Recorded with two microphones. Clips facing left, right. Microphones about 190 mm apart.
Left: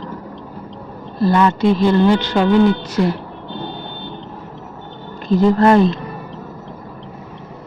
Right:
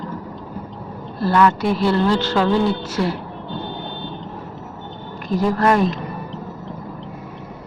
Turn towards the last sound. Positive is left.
turn(degrees=25)  # may be behind; listen again after turning